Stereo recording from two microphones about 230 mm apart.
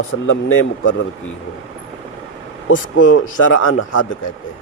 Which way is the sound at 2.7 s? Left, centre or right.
Left.